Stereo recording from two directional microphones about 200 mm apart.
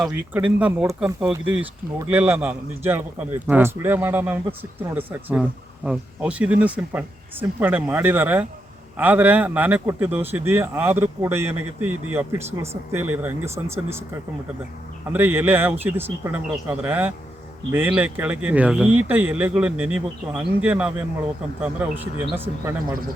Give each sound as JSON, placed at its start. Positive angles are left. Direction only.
{"t": 0.0, "sound": "a man's voice", "side_deg": -5}